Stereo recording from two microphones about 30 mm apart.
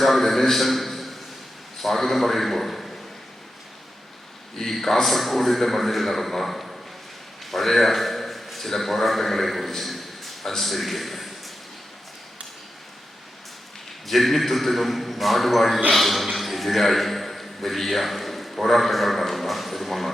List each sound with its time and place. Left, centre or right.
0.0 s a man's voice: centre
4.5 s a man's voice: centre
14.1 s a man's voice: centre